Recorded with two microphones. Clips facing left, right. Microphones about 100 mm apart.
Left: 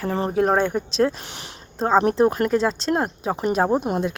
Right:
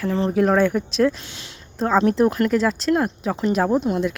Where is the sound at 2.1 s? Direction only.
25° left (ahead or behind).